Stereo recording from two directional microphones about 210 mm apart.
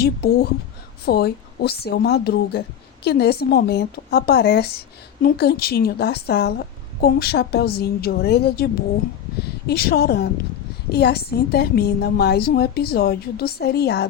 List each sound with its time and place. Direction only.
0.0 s speech: 50° left (ahead or behind)